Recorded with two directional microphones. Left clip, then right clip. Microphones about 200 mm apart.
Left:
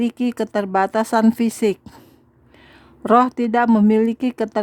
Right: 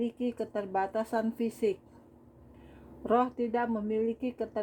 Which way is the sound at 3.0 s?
45° left (ahead or behind).